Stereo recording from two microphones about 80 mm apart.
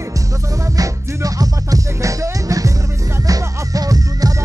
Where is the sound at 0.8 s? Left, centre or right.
Right.